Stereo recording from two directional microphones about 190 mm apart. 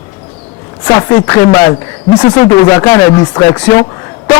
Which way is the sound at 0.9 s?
15° left (ahead or behind).